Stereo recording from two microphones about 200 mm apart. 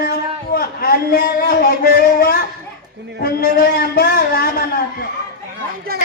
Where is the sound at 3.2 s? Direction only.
45° left (ahead or behind).